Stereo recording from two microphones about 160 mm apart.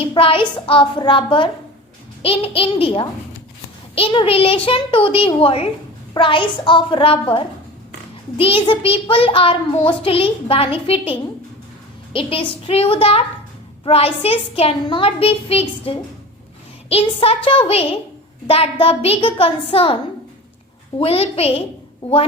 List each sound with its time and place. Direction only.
0.0 s child singing: 35° left (ahead or behind)
16.9 s child singing: 35° left (ahead or behind)
21.0 s child singing: 35° left (ahead or behind)